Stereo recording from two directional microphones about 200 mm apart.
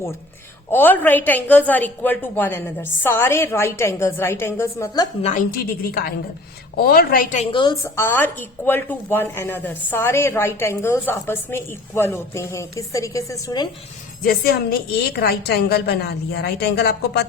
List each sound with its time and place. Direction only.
0.7 s a woman's voice: 10° left (ahead or behind)
5.2 s a woman's voice: 40° left (ahead or behind)
7.5 s a woman's voice: 20° left (ahead or behind)
14.3 s a woman's voice: 50° left (ahead or behind)